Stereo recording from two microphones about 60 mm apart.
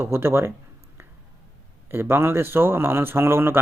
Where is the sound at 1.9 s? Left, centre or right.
Right.